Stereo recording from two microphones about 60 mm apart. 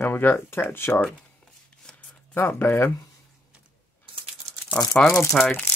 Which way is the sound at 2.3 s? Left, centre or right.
Left.